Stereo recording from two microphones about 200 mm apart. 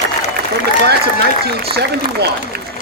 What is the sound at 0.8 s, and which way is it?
Speech, 55° right (ahead or behind).